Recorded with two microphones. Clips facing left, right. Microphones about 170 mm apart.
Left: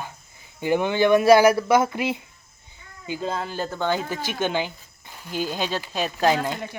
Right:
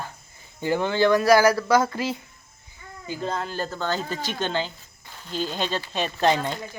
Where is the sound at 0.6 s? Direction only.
15° left (ahead or behind).